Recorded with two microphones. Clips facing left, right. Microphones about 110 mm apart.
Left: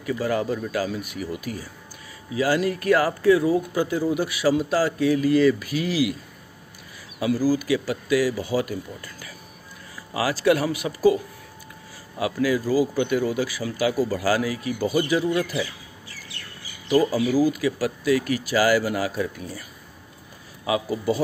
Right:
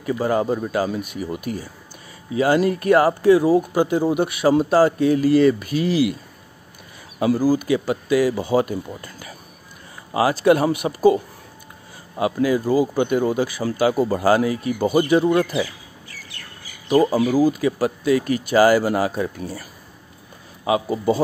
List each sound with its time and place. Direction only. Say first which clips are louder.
0.0 s speech: right 4 dB; 30° right (ahead or behind)
7.4 s speech: right 3 dB; 25° right (ahead or behind)
12.2 s speech: right 3 dB; 25° right (ahead or behind)
13.6 s speech: right 5 dB; 35° right (ahead or behind)
14.9 s speech: right 6 dB; 55° right (ahead or behind)
17.1 s speech: right 3 dB; 50° right (ahead or behind)
17.5 s speech: right 4 dB; 35° right (ahead or behind)
18.0 s speech: right 2 dB; 30° right (ahead or behind)
20.6 s speech: right 4 dB; 30° right (ahead or behind)